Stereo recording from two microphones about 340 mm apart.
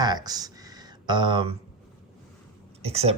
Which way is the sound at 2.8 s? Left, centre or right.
Centre.